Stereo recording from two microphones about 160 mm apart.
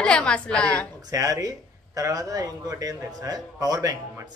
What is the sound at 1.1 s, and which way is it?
Speech, 20° right (ahead or behind).